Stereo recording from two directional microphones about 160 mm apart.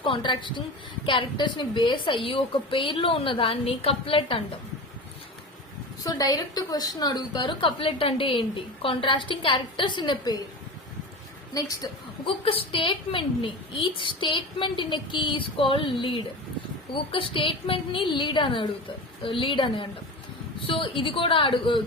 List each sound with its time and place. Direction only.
0.0 s a woman's voice: 30° left (ahead or behind)
6.0 s a woman's voice: 25° left (ahead or behind)
11.5 s a woman's voice: 30° left (ahead or behind)